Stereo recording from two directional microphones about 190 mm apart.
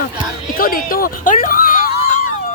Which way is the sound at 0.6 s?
50° left (ahead or behind).